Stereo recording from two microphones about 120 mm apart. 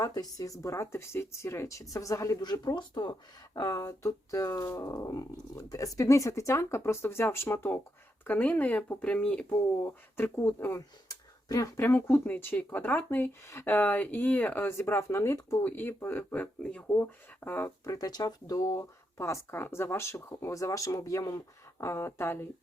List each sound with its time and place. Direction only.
0.0 s speech: 30° left (ahead or behind)
11.1 s a sound: 30° left (ahead or behind)
11.8 s speech: 15° left (ahead or behind)
17.8 s speech: 35° left (ahead or behind)